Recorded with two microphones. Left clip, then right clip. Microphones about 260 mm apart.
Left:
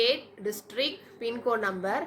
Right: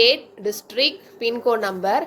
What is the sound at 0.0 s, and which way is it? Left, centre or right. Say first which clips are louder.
A woman's voice: right 9 dB; centre.